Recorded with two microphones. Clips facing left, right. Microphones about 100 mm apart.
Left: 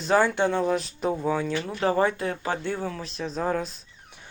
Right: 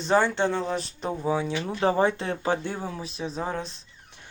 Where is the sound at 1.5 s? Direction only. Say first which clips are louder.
Even; 20° right (ahead or behind).